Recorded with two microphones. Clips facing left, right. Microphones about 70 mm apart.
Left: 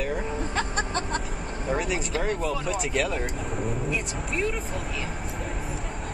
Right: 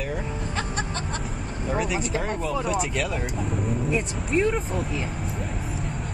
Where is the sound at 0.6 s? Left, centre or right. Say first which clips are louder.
Left 2 dB; left.